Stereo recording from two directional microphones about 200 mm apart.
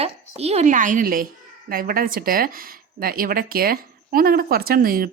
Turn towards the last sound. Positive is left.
turn(degrees=-45)  # may be behind; listen again after turning